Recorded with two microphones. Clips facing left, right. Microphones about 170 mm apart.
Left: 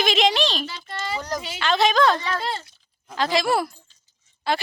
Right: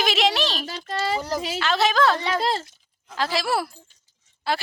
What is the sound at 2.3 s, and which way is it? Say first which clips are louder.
Speech: right 4 dB; 40° right (ahead or behind).